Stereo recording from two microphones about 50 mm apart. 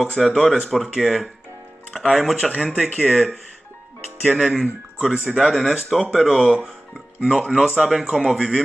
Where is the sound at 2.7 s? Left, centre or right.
Centre.